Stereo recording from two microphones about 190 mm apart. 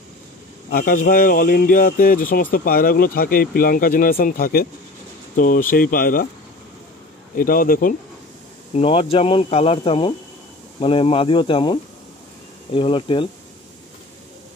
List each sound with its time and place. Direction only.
0.7 s speech: 50° left (ahead or behind)
7.3 s speech: 50° left (ahead or behind)
8.7 s speech: 30° left (ahead or behind)